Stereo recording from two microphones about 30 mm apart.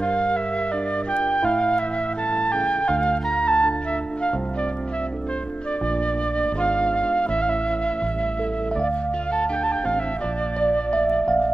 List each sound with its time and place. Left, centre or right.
0.1 s music: left
6.4 s music: left
9.4 s music: left
10.6 s flute: left